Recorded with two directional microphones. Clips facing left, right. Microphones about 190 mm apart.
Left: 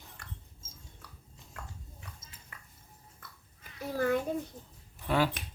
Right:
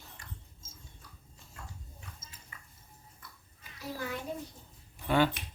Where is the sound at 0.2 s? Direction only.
60° left (ahead or behind).